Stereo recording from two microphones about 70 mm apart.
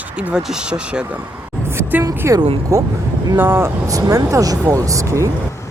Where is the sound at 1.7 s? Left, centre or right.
Right.